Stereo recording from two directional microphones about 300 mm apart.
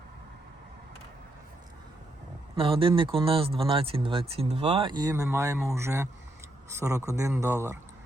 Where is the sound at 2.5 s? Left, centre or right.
Centre.